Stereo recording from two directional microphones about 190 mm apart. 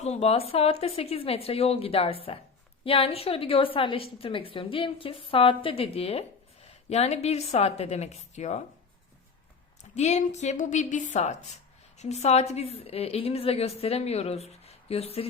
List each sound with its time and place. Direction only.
0.0 s a woman's voice: 35° left (ahead or behind)
9.9 s a woman's voice: 35° left (ahead or behind)